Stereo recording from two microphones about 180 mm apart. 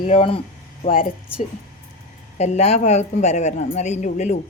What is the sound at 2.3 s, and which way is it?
A woman's voice, 40° left (ahead or behind).